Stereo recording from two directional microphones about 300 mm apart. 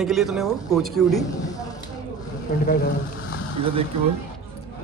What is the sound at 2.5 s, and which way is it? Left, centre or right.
Speech, left.